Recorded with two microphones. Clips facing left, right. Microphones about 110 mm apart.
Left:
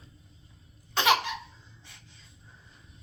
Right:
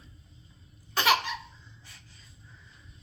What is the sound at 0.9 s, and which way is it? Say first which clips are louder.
Laughter: left 1 dB; 20° left (ahead or behind).